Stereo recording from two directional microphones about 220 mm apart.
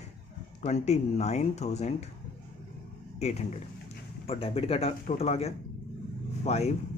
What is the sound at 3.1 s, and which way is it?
A man's voice, 30° left (ahead or behind).